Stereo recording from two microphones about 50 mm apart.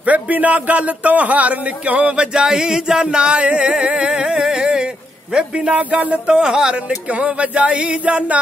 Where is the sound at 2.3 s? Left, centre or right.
Centre.